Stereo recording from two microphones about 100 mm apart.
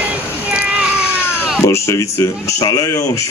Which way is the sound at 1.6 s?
30° left (ahead or behind).